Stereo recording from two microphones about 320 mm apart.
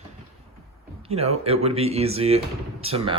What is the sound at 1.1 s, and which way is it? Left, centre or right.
Speech, centre.